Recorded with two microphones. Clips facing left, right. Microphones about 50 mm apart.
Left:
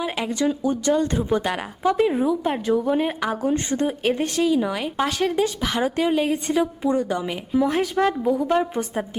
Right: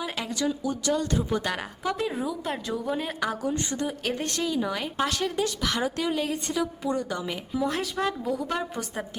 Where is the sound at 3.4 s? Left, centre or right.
Left.